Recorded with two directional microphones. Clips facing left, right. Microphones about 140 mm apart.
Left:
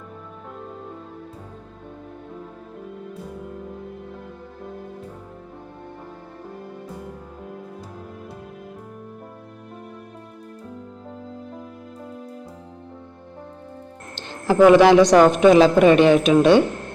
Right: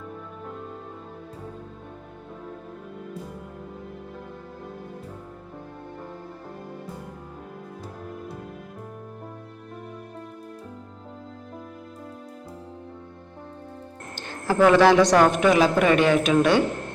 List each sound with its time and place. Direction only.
14.2 s a man's voice: 20° left (ahead or behind)